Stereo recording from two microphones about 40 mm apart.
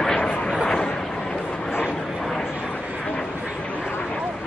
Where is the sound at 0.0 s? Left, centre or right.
Centre.